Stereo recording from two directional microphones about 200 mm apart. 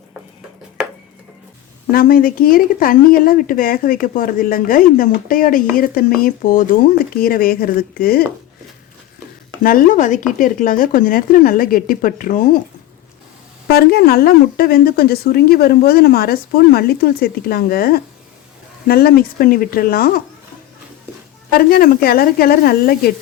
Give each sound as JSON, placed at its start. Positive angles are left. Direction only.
{"t": 1.9, "sound": "speech", "side_deg": 45}
{"t": 9.6, "sound": "speech", "side_deg": 45}
{"t": 13.7, "sound": "speech", "side_deg": 50}
{"t": 21.5, "sound": "speech", "side_deg": 45}